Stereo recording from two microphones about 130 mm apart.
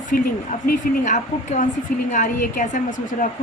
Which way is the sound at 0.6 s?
70° left (ahead or behind).